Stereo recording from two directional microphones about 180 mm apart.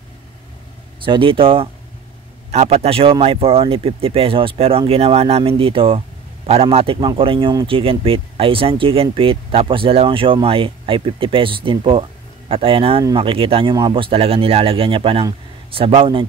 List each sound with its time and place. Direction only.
1.0 s speech: 30° right (ahead or behind)